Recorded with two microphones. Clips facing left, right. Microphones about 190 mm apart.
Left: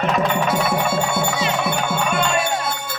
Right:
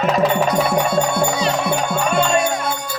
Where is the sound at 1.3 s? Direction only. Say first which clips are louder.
Right 3 dB; 35° right (ahead or behind).